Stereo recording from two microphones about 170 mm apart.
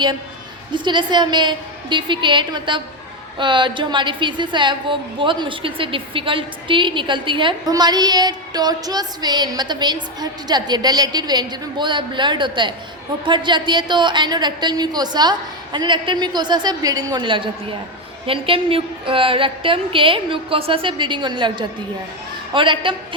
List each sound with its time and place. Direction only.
0.7 s a woman's voice: 25° right (ahead or behind)